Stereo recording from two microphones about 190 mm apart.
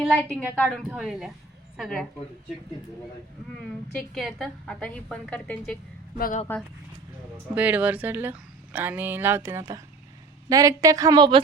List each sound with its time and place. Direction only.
0.0 s a woman's voice: centre (ahead or behind)
3.9 s a woman's voice: centre (ahead or behind)
6.1 s speech: 50° left (ahead or behind)
7.5 s a woman's voice: 10° right (ahead or behind); by 11.4 s 25° right (ahead or behind)